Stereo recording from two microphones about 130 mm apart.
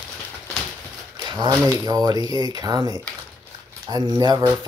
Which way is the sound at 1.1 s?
35° right (ahead or behind).